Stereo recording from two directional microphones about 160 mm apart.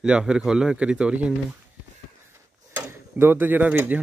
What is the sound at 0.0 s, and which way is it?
A man's voice, 5° right (ahead or behind).